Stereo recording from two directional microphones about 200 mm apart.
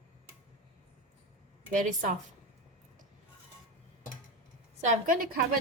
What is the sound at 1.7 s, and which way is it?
Speech, 40° right (ahead or behind).